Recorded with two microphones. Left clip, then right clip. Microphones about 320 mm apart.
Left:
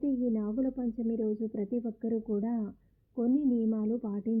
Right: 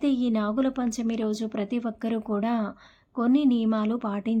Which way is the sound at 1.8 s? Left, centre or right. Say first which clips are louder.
Right 4 dB; centre.